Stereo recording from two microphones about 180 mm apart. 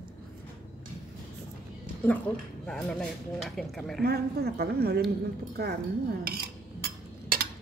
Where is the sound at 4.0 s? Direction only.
60° right (ahead or behind).